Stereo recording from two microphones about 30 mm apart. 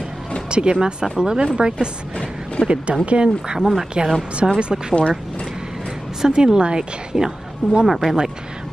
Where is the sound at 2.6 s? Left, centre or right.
Left.